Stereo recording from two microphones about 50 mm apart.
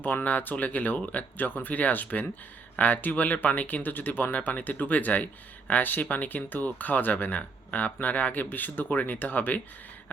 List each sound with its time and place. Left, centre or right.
0.0 s speech: left